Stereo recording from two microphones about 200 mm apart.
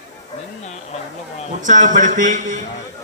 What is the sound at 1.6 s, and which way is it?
Speech, 40° right (ahead or behind).